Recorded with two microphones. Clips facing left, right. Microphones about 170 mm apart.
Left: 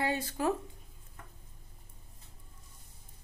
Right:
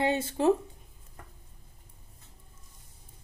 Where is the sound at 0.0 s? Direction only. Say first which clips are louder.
Right 6 dB; 25° right (ahead or behind).